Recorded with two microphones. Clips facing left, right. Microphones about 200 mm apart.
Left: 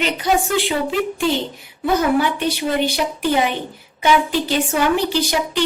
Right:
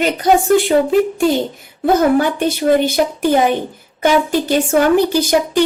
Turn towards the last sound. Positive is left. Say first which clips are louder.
# right 5 dB
turn(degrees=-45)  # may be behind; listen again after turning